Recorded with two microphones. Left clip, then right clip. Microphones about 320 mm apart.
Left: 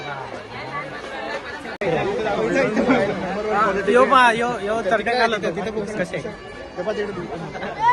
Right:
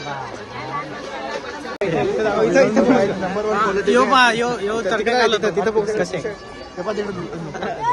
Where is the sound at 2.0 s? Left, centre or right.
Centre.